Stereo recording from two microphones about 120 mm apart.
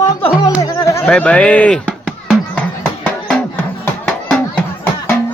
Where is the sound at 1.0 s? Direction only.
10° left (ahead or behind).